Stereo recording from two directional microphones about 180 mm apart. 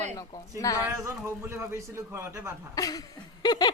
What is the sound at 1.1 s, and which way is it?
A man's voice, 15° right (ahead or behind).